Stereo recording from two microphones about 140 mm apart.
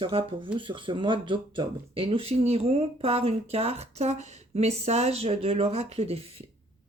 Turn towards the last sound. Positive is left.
turn(degrees=-50)  # may be behind; listen again after turning